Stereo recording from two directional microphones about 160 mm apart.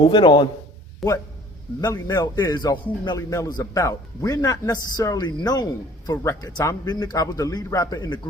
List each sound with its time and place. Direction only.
0.0 s a man's voice: 30° left (ahead or behind)
1.0 s a man's voice: centre (ahead or behind)
1.8 s a man's voice: 25° left (ahead or behind)